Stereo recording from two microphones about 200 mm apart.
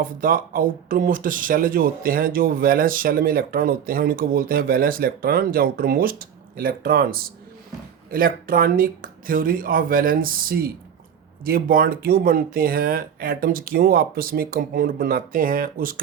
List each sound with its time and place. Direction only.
0.0 s speech: 45° right (ahead or behind)